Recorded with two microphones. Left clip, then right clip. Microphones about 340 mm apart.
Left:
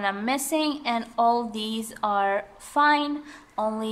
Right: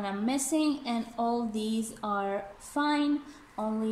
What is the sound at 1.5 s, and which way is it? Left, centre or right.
A woman's voice, left.